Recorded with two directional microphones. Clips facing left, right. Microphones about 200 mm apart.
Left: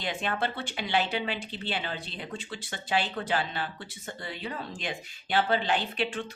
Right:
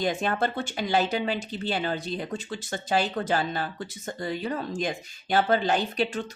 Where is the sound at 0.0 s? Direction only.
45° right (ahead or behind).